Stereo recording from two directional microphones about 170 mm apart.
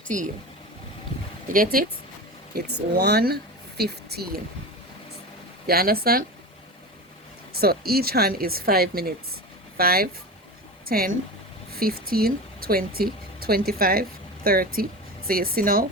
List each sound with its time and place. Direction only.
0.1 s speech: 50° right (ahead or behind)
1.5 s speech: 55° right (ahead or behind)
3.0 s speech: 70° right (ahead or behind)
5.6 s speech: 65° right (ahead or behind)
7.5 s a woman's voice: 65° right (ahead or behind)